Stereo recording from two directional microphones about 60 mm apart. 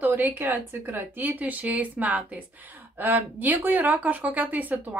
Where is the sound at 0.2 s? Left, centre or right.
Right.